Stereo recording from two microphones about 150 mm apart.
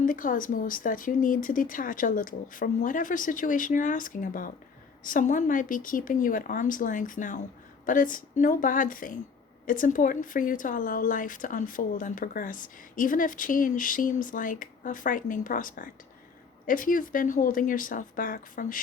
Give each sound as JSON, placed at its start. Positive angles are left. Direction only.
{"t": 0.0, "sound": "a woman's voice", "side_deg": 65}